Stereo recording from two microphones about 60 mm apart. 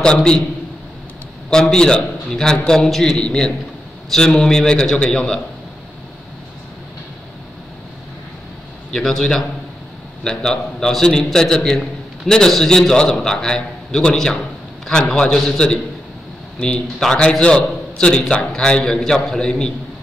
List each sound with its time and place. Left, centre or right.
0.0 s a man's voice: centre
1.5 s a man's voice: centre
8.9 s a man's voice: centre
16.8 s a man's voice: centre